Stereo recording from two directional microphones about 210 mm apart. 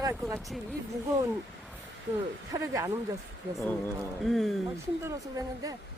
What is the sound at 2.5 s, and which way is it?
Speech, 15° right (ahead or behind).